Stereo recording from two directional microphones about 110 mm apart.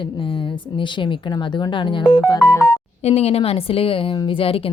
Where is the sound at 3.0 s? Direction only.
70° left (ahead or behind).